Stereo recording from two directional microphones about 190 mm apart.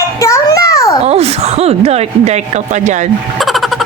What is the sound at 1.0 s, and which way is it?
Speech, 35° right (ahead or behind).